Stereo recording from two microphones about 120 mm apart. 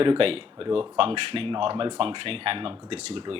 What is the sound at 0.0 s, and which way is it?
Speech, 50° right (ahead or behind).